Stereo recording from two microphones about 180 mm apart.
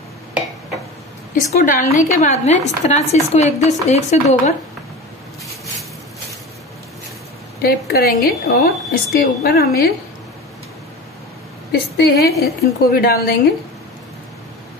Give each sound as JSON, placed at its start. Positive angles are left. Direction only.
{"t": 1.3, "sound": "a woman's voice", "side_deg": 45}
{"t": 7.6, "sound": "a woman's voice", "side_deg": 60}
{"t": 11.7, "sound": "a woman's voice", "side_deg": 60}